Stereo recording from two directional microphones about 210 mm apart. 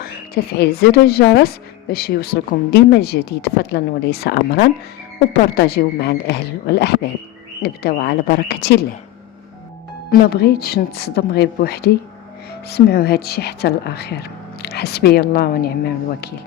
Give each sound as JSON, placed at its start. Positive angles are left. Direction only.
{"t": 0.0, "sound": "speech", "side_deg": 45}
{"t": 10.1, "sound": "speech", "side_deg": 50}